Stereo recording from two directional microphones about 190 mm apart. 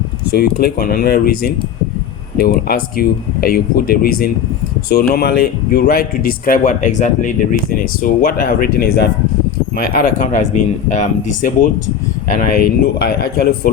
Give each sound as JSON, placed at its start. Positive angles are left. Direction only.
{"t": 0.3, "sound": "speech", "side_deg": 55}
{"t": 12.4, "sound": "speech", "side_deg": 55}